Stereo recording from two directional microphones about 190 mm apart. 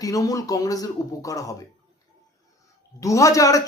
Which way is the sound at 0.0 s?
20° left (ahead or behind).